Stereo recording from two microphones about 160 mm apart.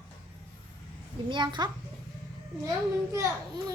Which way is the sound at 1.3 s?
30° right (ahead or behind).